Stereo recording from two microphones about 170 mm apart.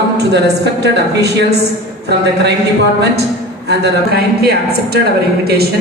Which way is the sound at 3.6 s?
75° right (ahead or behind).